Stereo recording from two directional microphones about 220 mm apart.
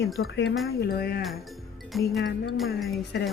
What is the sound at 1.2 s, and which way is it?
Music, centre (ahead or behind).